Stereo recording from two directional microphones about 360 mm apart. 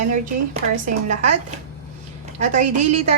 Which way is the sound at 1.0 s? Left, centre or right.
Centre.